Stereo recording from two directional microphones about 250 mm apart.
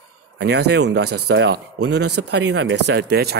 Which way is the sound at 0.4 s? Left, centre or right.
Right.